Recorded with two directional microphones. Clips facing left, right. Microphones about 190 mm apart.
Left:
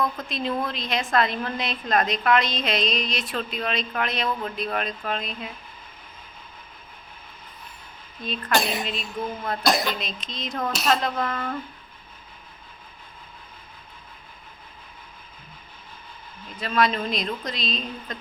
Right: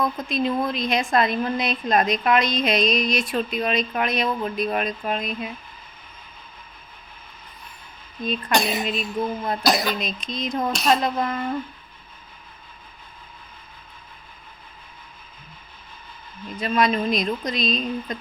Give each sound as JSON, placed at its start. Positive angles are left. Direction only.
{"t": 0.0, "sound": "a woman's voice", "side_deg": -10}
{"t": 8.5, "sound": "speech", "side_deg": 0}
{"t": 8.8, "sound": "a woman's voice", "side_deg": -15}
{"t": 9.6, "sound": "speech", "side_deg": 0}
{"t": 10.0, "sound": "a woman's voice", "side_deg": -15}
{"t": 16.6, "sound": "a woman's voice", "side_deg": -15}